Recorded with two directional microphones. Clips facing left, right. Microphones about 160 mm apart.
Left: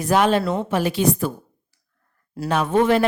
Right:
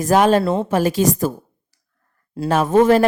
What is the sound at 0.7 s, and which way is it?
Speech, 45° right (ahead or behind).